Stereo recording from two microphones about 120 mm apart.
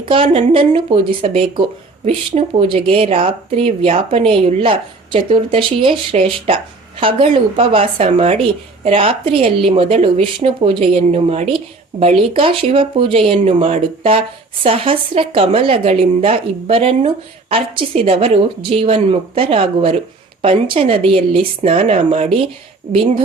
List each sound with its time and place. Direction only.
0.1 s speech: 45° right (ahead or behind)